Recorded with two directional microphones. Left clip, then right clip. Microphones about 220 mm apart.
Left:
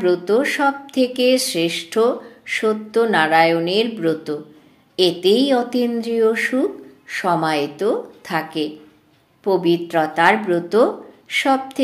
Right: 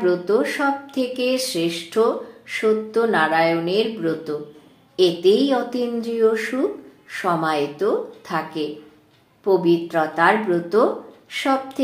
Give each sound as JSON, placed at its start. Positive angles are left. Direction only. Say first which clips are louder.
{"t": 0.0, "sound": "speech", "louder": "left 2 dB", "side_deg": 35}